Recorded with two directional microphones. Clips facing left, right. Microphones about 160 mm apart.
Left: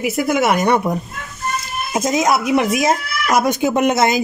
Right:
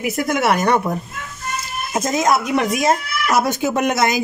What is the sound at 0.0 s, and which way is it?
Speech, 10° left (ahead or behind).